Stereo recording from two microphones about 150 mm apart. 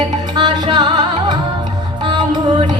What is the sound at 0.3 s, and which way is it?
Music, 30° right (ahead or behind).